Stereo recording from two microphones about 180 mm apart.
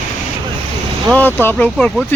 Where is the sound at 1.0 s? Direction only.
10° left (ahead or behind).